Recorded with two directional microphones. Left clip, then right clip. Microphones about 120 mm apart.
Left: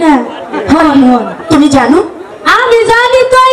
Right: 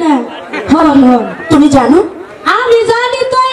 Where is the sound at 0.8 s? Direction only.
30° left (ahead or behind).